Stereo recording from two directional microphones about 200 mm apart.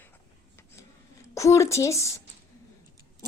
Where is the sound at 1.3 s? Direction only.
15° left (ahead or behind).